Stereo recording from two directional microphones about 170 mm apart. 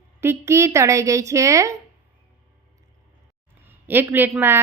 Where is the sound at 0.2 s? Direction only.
15° right (ahead or behind).